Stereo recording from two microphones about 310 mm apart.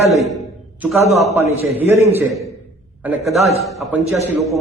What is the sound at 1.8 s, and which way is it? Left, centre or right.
A man's voice, centre.